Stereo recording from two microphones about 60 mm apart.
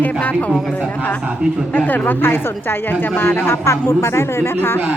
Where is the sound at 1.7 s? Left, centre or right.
Left.